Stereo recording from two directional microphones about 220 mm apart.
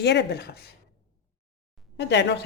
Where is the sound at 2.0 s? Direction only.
50° left (ahead or behind).